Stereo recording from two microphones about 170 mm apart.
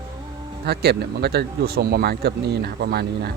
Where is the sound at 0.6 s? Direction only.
70° right (ahead or behind).